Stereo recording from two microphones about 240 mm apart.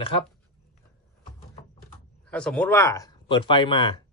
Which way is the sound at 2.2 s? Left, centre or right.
Centre.